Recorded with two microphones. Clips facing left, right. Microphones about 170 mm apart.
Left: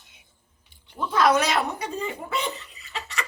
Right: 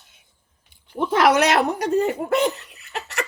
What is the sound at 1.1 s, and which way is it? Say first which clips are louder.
Speech: right 4 dB; 75° right (ahead or behind).